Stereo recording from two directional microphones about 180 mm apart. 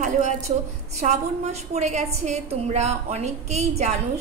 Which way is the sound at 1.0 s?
40° right (ahead or behind).